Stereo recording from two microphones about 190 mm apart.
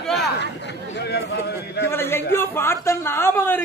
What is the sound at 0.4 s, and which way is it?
Chatter, 65° left (ahead or behind).